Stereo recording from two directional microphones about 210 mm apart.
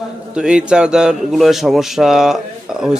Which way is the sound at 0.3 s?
5° right (ahead or behind).